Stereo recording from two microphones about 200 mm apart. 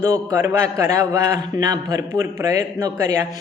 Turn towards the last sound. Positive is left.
turn(degrees=-15)  # may be behind; listen again after turning